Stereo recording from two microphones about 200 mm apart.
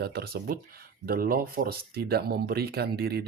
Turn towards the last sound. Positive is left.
turn(degrees=-50)  # may be behind; listen again after turning